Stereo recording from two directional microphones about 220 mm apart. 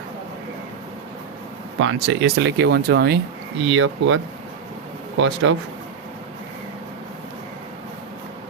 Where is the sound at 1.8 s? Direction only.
60° right (ahead or behind).